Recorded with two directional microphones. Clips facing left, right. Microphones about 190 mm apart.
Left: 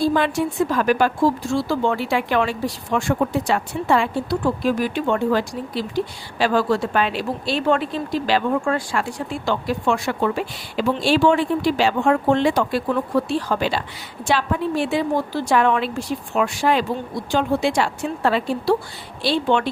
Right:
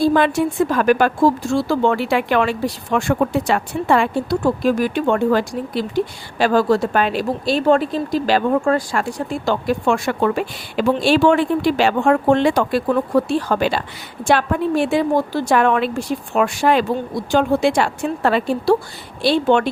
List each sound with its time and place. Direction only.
0.0 s a woman's voice: 55° right (ahead or behind)